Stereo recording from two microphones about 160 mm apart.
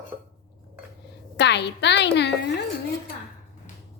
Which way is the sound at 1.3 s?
90° left.